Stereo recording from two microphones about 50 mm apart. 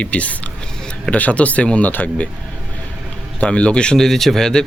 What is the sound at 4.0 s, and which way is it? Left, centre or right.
Speech, centre.